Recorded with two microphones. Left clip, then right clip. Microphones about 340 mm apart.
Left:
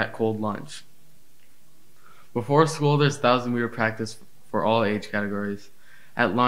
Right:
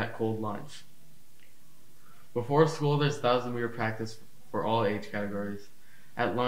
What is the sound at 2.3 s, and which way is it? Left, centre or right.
Speech, left.